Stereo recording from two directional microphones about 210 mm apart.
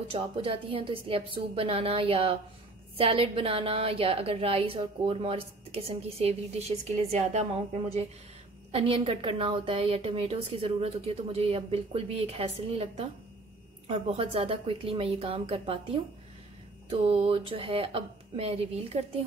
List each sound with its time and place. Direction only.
0.1 s a woman's voice: 25° right (ahead or behind)